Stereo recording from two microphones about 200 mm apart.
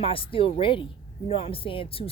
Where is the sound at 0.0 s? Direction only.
25° left (ahead or behind).